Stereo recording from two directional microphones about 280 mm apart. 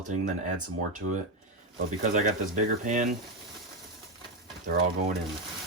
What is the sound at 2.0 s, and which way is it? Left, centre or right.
Speech, right.